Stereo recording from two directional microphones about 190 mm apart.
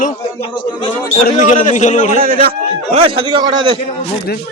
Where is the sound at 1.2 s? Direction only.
40° left (ahead or behind).